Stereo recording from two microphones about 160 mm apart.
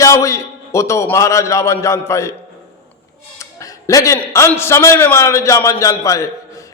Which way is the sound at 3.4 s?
20° left (ahead or behind).